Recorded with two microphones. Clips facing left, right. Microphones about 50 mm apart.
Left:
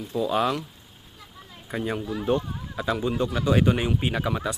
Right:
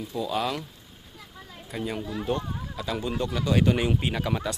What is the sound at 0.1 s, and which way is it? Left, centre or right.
Speech, centre.